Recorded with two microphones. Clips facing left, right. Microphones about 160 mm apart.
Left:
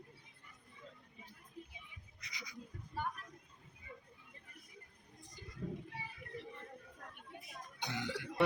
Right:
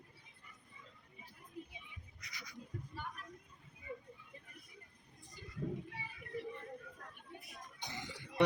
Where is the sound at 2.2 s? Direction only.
15° left (ahead or behind).